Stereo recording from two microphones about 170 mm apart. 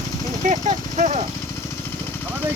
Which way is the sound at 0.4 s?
45° right (ahead or behind).